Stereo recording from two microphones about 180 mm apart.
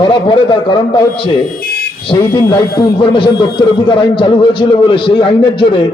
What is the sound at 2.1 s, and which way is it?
A man's voice, 25° left (ahead or behind).